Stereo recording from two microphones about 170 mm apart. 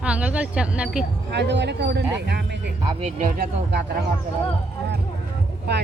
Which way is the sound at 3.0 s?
50° right (ahead or behind).